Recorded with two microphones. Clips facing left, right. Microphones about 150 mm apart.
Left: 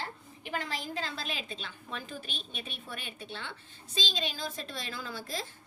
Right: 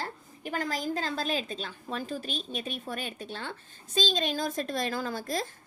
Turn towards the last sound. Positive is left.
turn(degrees=-45)  # may be behind; listen again after turning